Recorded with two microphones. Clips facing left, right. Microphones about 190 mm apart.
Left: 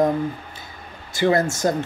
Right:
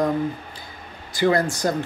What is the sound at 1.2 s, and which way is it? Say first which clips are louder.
Speech: left 1 dB; 25° left (ahead or behind).